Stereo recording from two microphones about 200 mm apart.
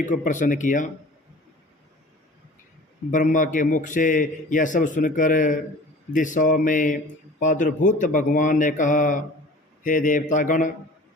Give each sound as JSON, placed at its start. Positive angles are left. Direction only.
{"t": 0.0, "sound": "a man's voice", "side_deg": 40}
{"t": 3.1, "sound": "a man's voice", "side_deg": 40}